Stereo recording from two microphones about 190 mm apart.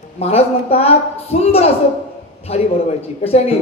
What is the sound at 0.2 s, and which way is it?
A woman's voice, 30° left (ahead or behind).